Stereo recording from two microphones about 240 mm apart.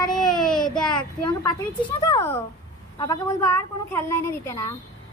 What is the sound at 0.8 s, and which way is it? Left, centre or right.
A child's voice, centre.